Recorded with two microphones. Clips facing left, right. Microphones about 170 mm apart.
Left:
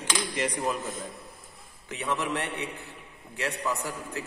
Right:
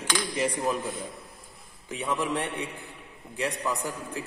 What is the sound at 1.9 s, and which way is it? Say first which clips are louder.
A man's voice: right 1 dB; 10° right (ahead or behind).